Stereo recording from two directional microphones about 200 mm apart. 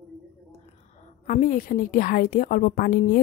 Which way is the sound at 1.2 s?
40° left (ahead or behind).